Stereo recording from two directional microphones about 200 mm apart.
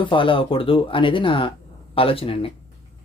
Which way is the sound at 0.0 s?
25° left (ahead or behind).